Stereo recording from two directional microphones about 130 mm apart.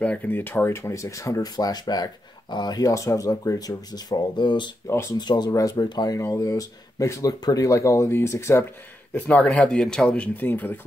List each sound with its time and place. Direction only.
0.0 s speech: 10° left (ahead or behind); by 4.6 s 35° left (ahead or behind)
4.9 s speech: 20° left (ahead or behind)
5.2 s speech: 35° left (ahead or behind)
9.1 s speech: 10° left (ahead or behind)